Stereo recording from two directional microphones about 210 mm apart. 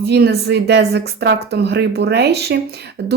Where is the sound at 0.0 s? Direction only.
50° right (ahead or behind).